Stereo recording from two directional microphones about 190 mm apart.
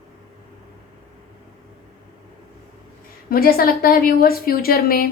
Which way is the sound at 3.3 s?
50° left (ahead or behind).